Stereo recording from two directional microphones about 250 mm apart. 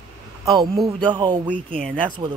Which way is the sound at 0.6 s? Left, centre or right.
Centre.